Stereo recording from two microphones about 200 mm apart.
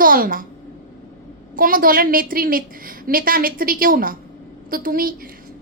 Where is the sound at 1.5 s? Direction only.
45° right (ahead or behind).